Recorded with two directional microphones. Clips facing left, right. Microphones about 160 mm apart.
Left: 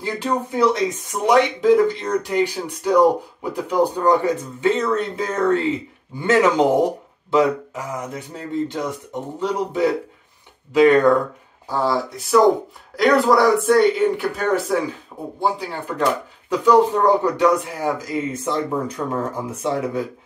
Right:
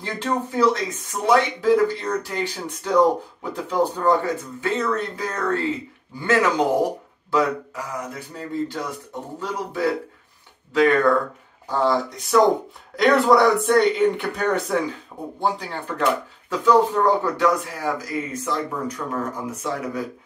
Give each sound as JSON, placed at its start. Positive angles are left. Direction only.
{"t": 0.0, "sound": "speech", "side_deg": 15}
{"t": 11.7, "sound": "a man's voice", "side_deg": 5}